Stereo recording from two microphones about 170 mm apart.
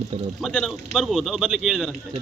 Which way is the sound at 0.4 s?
Centre (ahead or behind).